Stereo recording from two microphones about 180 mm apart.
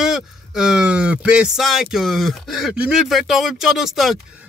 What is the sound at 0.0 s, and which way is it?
Speech, 5° right (ahead or behind).